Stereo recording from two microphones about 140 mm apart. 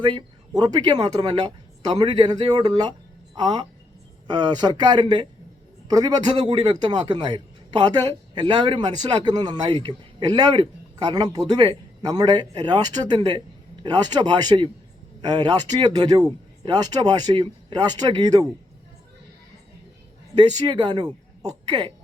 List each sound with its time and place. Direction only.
0.0 s a man's voice: 35° right (ahead or behind)
20.3 s a man's voice: 30° right (ahead or behind)